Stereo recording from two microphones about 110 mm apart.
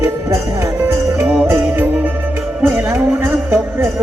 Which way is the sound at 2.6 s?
15° right (ahead or behind).